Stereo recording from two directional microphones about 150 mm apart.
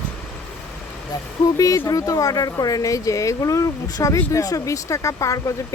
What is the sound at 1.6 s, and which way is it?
Speech, 20° left (ahead or behind).